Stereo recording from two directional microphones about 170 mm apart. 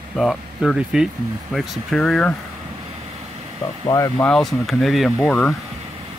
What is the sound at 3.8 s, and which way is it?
Speech, 20° left (ahead or behind).